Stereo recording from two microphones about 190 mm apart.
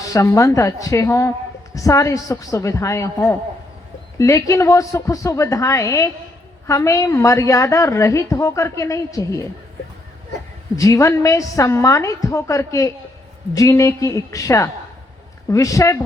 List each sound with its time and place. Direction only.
0.0 s a woman's voice: 15° left (ahead or behind)
4.2 s a woman's voice: 15° left (ahead or behind)
10.8 s a woman's voice: 15° left (ahead or behind)